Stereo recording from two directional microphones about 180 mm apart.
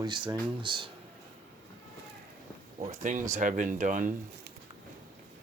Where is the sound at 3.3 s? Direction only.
45° right (ahead or behind).